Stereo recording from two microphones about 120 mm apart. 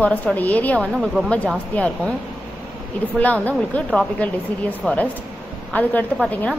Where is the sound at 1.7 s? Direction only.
10° left (ahead or behind).